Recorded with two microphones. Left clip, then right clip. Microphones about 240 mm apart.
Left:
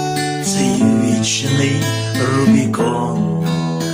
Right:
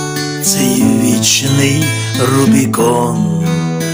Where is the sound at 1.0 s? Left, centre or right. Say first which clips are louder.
Right 5 dB; right.